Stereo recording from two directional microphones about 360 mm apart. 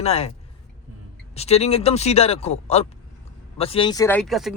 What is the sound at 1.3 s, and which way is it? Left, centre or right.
Speech, centre.